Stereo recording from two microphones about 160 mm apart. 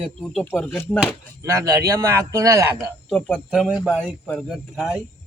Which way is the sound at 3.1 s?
10° left (ahead or behind).